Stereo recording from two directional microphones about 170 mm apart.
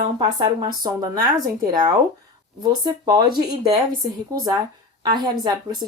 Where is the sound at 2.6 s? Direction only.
25° right (ahead or behind).